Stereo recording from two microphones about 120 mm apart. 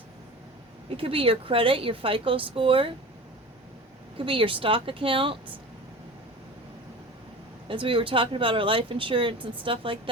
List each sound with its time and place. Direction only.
0.9 s speech: 50° right (ahead or behind)
4.2 s speech: 45° right (ahead or behind)
7.7 s speech: 45° right (ahead or behind)